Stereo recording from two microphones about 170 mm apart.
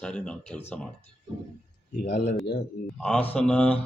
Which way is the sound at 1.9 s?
60° left (ahead or behind).